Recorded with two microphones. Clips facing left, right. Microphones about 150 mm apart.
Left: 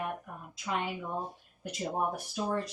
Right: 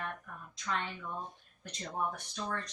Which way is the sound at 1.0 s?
40° left (ahead or behind).